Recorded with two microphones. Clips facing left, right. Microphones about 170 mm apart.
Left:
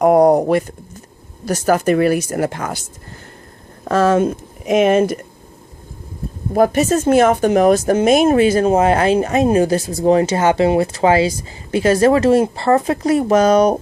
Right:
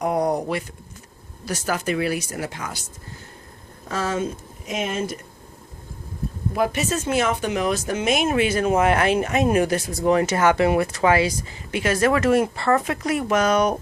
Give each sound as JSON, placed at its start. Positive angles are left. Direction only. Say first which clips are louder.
{"t": 0.0, "sound": "a sound", "louder": "left 11 dB", "side_deg": 55}
{"t": 1.5, "sound": "speech", "louder": "left 10 dB", "side_deg": 45}
{"t": 3.8, "sound": "speech", "louder": "left 11 dB", "side_deg": 60}
{"t": 6.5, "sound": "speech", "louder": "left 9 dB", "side_deg": 40}